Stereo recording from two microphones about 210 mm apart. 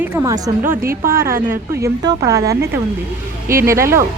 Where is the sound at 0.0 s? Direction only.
10° right (ahead or behind).